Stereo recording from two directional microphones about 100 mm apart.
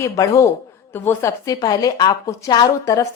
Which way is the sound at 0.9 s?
20° left (ahead or behind).